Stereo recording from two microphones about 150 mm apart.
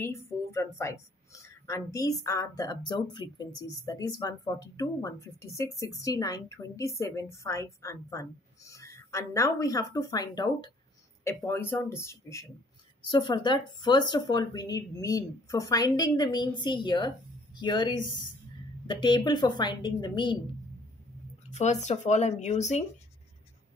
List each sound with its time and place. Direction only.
0.0 s a woman's voice: 20° left (ahead or behind)
11.2 s speech: 15° left (ahead or behind)
13.1 s a woman's voice: 30° left (ahead or behind)
21.5 s speech: 50° left (ahead or behind)